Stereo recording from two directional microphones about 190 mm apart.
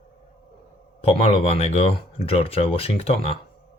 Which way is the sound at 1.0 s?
30° left (ahead or behind).